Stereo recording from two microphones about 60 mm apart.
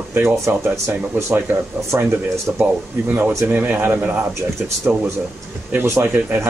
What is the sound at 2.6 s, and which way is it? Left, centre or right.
Speech, right.